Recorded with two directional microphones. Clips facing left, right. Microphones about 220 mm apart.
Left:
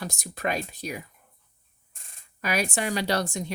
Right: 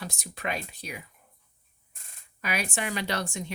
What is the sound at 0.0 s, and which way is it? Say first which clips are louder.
A woman's voice: left 5 dB; 40° left (ahead or behind).